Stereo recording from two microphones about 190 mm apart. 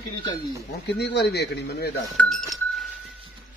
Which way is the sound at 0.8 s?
65° left (ahead or behind).